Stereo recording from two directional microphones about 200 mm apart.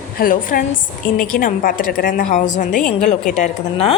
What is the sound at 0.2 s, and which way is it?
A woman's voice, 45° left (ahead or behind).